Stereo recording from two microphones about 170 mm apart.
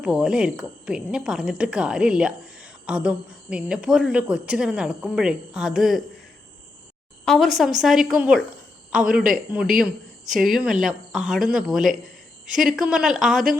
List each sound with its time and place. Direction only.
0.0 s speech: 5° right (ahead or behind)
7.3 s speech: centre (ahead or behind)